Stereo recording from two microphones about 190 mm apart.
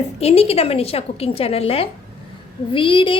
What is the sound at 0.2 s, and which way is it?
A woman's voice, 30° left (ahead or behind).